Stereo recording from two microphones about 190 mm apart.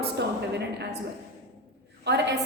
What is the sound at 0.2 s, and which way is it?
Speech, 65° right (ahead or behind).